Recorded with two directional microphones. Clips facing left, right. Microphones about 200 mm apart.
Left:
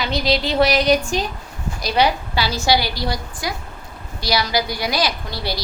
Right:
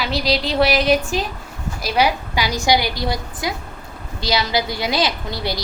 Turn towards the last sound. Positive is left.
turn(degrees=-20)  # may be behind; listen again after turning